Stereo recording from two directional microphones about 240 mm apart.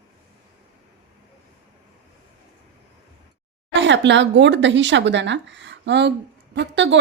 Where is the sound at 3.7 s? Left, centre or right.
Right.